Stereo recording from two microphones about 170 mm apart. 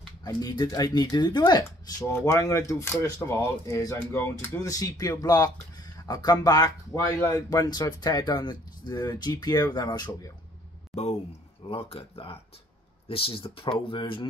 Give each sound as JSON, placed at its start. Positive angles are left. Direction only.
{"t": 0.2, "sound": "speech", "side_deg": 25}
{"t": 11.6, "sound": "speech", "side_deg": 35}